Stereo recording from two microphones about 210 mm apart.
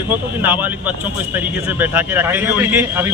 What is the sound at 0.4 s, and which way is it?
A man's voice, 10° right (ahead or behind).